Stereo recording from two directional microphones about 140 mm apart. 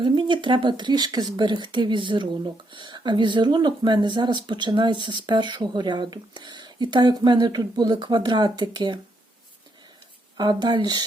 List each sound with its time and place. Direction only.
0.0 s speech: 35° right (ahead or behind)
10.3 s speech: 30° right (ahead or behind)